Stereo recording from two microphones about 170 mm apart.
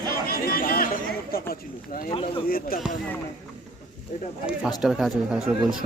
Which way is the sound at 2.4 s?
60° left (ahead or behind).